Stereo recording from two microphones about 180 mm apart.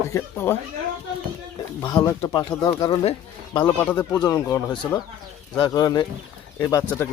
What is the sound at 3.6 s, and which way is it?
Speech, 10° left (ahead or behind).